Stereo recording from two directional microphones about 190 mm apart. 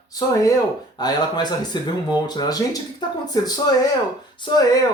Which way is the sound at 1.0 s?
20° left (ahead or behind).